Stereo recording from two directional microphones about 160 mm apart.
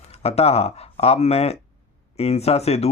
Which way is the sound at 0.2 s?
40° left (ahead or behind).